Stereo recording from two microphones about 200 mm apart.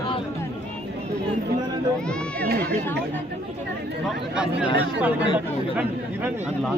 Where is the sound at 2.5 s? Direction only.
55° right (ahead or behind).